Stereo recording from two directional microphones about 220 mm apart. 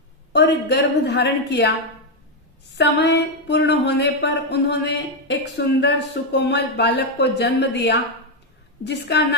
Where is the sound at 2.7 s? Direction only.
50° left (ahead or behind).